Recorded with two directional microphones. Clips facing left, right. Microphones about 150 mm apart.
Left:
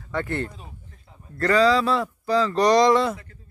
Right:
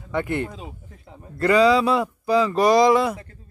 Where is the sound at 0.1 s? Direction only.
15° right (ahead or behind).